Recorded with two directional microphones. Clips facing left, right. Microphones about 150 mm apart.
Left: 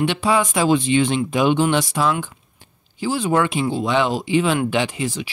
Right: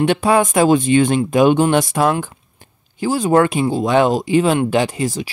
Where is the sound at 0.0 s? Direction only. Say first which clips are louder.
Right 4 dB; 50° right (ahead or behind).